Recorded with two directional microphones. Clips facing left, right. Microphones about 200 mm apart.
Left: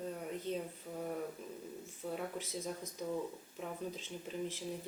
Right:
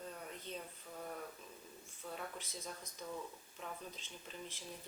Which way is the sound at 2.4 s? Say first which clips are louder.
Left 8 dB; 5° left (ahead or behind).